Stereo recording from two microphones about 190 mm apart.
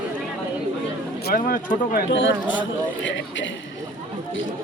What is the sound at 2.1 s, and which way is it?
A man's voice, 75° left (ahead or behind).